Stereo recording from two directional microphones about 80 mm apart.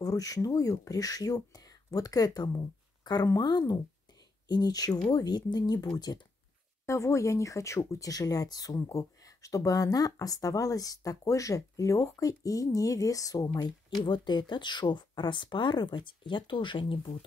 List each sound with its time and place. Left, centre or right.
0.0 s speech: left
8.7 s speech: left
14.0 s speech: left